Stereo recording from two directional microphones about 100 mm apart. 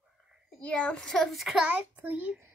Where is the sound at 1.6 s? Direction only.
15° right (ahead or behind).